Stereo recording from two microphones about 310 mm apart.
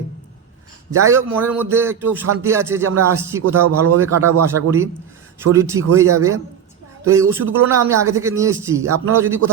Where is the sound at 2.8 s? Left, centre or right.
Right.